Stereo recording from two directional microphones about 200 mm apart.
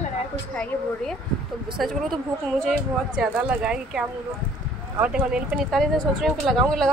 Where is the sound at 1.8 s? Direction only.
Centre (ahead or behind).